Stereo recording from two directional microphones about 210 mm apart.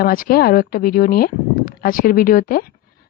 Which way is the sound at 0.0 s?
45° left (ahead or behind).